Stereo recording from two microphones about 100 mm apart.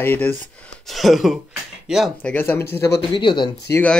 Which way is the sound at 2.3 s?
20° left (ahead or behind).